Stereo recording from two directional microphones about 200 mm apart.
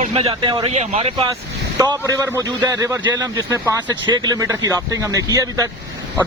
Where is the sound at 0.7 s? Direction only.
35° right (ahead or behind).